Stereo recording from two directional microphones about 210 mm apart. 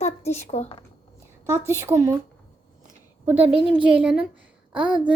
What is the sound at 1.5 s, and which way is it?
Speech, 15° right (ahead or behind).